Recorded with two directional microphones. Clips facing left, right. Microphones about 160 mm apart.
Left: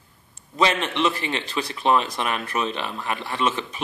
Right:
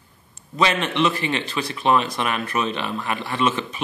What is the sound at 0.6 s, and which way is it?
Speech, 30° left (ahead or behind).